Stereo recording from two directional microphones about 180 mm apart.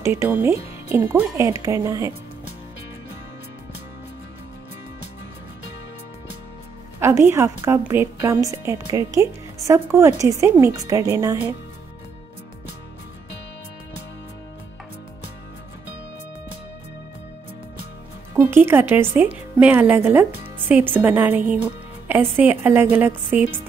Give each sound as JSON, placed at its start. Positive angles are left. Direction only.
{"t": 0.0, "sound": "a woman's voice", "side_deg": -15}
{"t": 7.0, "sound": "a woman's voice", "side_deg": -15}
{"t": 18.3, "sound": "a woman's voice", "side_deg": -10}